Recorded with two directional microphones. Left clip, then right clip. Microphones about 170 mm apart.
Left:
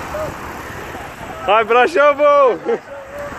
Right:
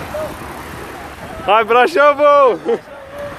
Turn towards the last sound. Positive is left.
turn(degrees=-15)  # may be behind; listen again after turning